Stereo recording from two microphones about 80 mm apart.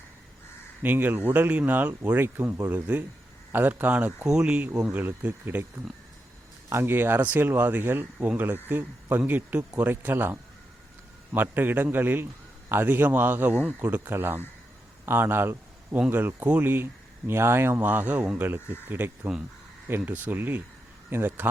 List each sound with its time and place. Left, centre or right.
0.8 s a man's voice: right